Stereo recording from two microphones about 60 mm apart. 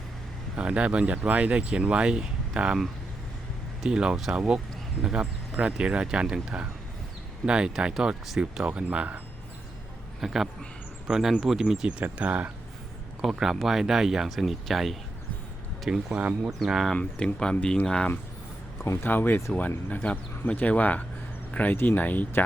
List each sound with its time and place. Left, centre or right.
0.5 s speech: right
3.8 s speech: centre
10.2 s speech: centre; by 12.5 s right
13.2 s speech: centre
15.9 s speech: centre
16.9 s speech: centre
18.9 s speech: left